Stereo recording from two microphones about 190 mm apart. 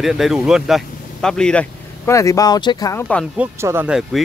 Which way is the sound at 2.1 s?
15° left (ahead or behind).